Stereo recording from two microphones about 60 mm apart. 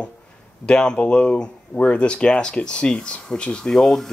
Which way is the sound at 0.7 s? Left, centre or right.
Centre.